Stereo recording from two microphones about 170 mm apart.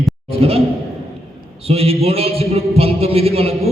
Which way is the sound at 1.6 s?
35° right (ahead or behind).